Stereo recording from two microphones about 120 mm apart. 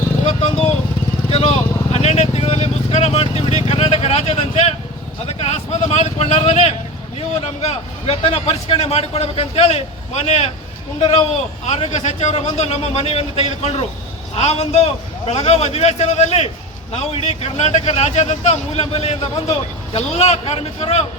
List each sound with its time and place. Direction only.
0.3 s vehicle: 55° left (ahead or behind)
5.2 s speech: 60° left (ahead or behind)
11.0 s speech: 45° left (ahead or behind)
11.6 s speech: 70° left (ahead or behind)